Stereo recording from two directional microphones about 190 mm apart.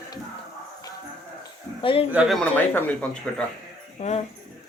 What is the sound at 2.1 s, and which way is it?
Speech, centre (ahead or behind).